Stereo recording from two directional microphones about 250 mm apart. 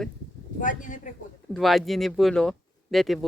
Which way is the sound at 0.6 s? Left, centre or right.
Left.